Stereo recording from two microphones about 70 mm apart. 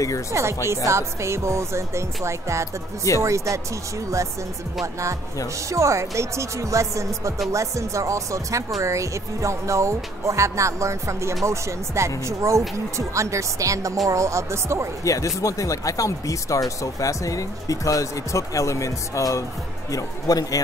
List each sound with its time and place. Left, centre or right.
0.3 s speech: right
5.7 s speech: right
15.0 s speech: left